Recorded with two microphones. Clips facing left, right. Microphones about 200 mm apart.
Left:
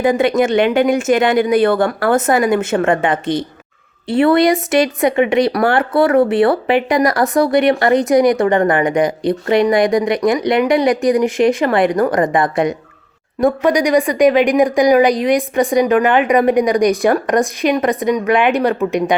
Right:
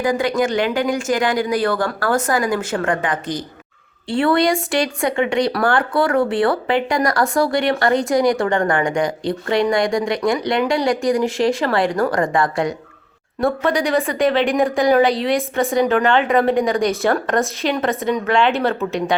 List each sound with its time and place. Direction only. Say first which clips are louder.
0.0 s a woman's voice: left 5 dB; 25° left (ahead or behind)